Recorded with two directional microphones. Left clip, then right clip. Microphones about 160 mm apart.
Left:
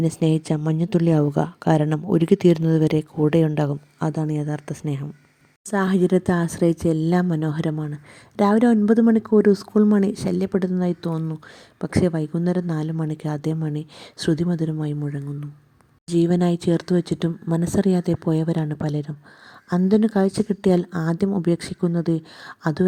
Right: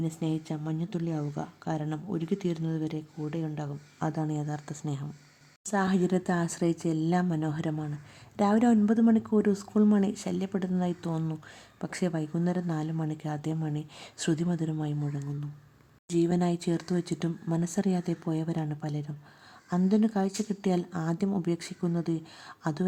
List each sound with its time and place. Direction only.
0.0 s speech: 50° left (ahead or behind)
4.0 s a woman's voice: 30° left (ahead or behind)